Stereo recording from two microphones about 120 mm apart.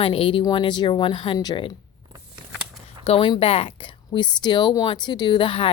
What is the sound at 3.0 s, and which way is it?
A woman's voice, 50° left (ahead or behind).